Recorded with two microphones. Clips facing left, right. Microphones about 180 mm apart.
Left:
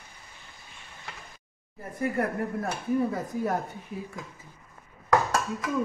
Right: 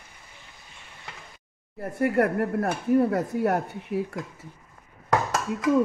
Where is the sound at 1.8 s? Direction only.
65° right (ahead or behind).